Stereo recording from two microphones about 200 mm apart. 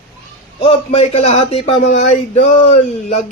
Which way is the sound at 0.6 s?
30° left (ahead or behind).